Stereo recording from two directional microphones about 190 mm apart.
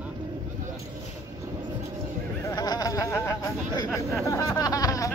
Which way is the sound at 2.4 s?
20° left (ahead or behind).